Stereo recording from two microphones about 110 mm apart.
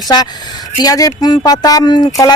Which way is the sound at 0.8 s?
30° left (ahead or behind).